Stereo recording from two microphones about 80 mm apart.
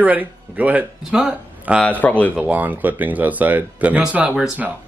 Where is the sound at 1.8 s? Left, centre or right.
Centre.